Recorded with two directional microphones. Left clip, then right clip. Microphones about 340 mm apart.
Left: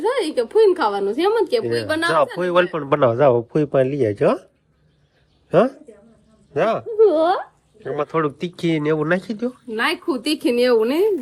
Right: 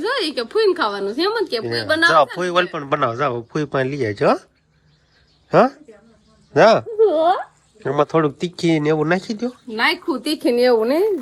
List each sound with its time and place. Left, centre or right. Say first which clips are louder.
0.0 s a woman's voice: left 1 dB; centre
1.6 s speech: right 3 dB; centre
5.5 s speech: right 2 dB; centre
7.1 s speech: right 1 dB; left
7.9 s speech: right 4 dB; centre